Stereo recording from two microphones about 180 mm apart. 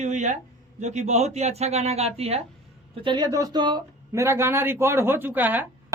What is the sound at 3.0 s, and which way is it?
Speech, 25° right (ahead or behind).